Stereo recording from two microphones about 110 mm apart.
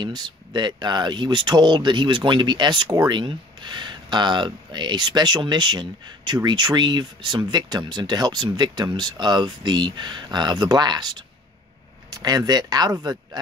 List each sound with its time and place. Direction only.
0.0 s speech: 40° right (ahead or behind)